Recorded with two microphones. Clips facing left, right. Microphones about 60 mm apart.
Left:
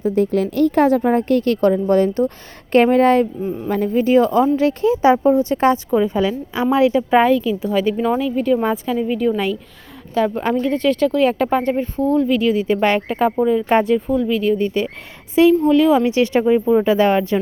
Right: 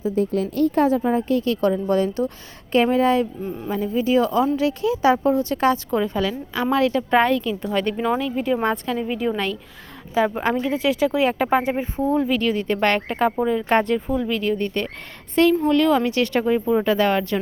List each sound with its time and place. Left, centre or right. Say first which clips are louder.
0.1 s speech: left 4 dB; left
1.0 s a woman's voice: left 4 dB; left
1.6 s a woman's voice: left 6 dB; left
5.9 s a woman's voice: left 5 dB; centre
10.2 s speech: left 2 dB; centre
12.3 s a woman's voice: left 5 dB; centre
16.0 s a woman's voice: left 5 dB; centre